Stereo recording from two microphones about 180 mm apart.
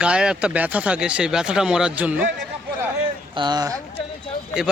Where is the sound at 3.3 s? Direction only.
25° right (ahead or behind).